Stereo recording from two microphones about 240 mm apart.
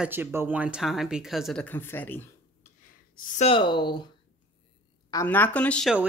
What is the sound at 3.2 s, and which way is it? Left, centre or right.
Speech, left.